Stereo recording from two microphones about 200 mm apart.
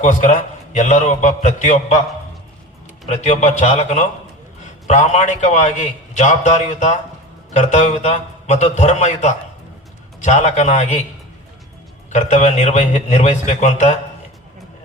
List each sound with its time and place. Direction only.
0.0 s a man's voice: 35° left (ahead or behind)
3.1 s a man's voice: 35° left (ahead or behind)
12.1 s a man's voice: 35° left (ahead or behind)